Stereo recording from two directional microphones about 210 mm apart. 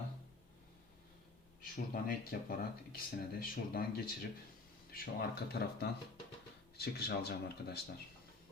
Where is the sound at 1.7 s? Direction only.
40° left (ahead or behind).